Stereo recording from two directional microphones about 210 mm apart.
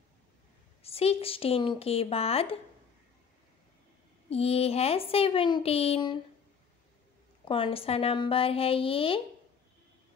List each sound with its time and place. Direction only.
0.8 s speech: 30° left (ahead or behind)
4.3 s speech: 30° left (ahead or behind)
7.4 s speech: 25° left (ahead or behind)